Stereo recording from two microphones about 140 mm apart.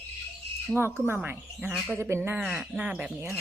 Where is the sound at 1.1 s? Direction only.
10° right (ahead or behind).